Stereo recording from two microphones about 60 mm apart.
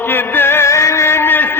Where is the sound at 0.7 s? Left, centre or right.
Left.